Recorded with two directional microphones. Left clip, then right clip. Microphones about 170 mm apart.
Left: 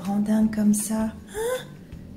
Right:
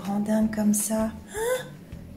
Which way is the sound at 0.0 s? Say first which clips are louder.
Left 1 dB; 5° left (ahead or behind).